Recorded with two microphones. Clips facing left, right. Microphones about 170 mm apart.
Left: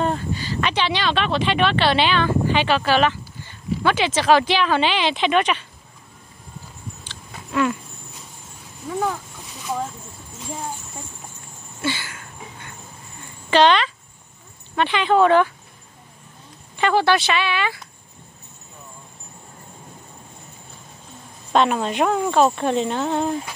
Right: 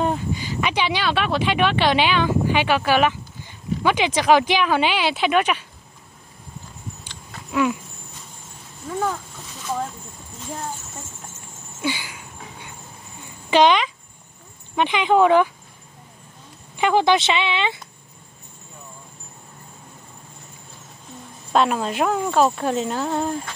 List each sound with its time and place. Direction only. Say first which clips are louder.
0.0 s speech: even; 10° right (ahead or behind)
11.8 s a sound: even; 10° right (ahead or behind)
13.5 s speech: even; 10° right (ahead or behind)
16.7 s speech: right 1 dB; 15° right (ahead or behind)
21.5 s speech: left 1 dB; centre (ahead or behind)